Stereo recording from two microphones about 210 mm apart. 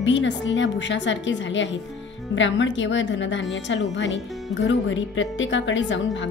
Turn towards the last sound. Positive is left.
turn(degrees=60)  # may be behind; listen again after turning